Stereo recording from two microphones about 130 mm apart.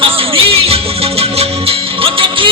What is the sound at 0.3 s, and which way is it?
Music, 45° right (ahead or behind).